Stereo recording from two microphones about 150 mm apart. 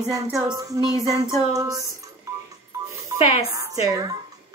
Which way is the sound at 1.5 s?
20° right (ahead or behind).